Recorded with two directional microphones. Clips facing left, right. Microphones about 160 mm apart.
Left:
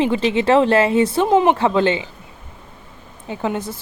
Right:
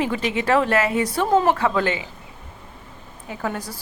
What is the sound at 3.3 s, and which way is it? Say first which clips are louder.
Speech: left 5 dB; 25° left (ahead or behind).